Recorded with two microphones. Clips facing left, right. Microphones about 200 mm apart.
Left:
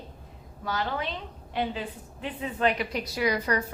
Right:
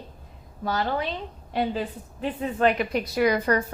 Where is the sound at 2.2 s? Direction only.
45° right (ahead or behind).